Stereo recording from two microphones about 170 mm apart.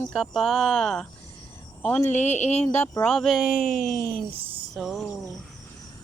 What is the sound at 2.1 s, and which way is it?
Speech, 40° left (ahead or behind).